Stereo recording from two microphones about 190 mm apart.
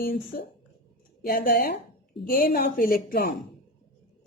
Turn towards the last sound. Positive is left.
turn(degrees=50)  # may be behind; listen again after turning